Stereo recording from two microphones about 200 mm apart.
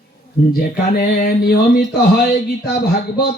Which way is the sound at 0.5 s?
50° left (ahead or behind).